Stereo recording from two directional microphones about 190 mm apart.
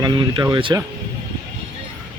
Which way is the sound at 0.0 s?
20° right (ahead or behind).